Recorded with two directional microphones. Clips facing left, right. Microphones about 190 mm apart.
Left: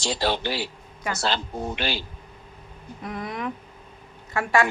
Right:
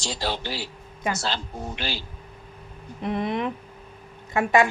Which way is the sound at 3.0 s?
25° right (ahead or behind).